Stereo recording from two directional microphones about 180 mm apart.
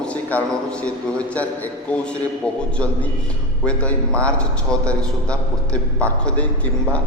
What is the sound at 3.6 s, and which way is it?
A man's voice, 5° left (ahead or behind).